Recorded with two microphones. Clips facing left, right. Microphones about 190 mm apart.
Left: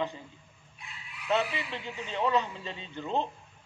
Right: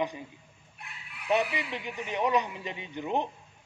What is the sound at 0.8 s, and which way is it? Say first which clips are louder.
Fowl: right 2 dB; 60° right (ahead or behind).